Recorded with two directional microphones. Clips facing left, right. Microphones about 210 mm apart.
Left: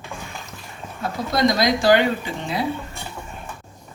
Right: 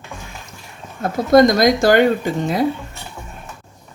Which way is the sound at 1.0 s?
50° right (ahead or behind).